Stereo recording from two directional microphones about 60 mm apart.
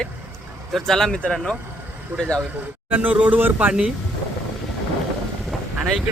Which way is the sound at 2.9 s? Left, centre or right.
Right.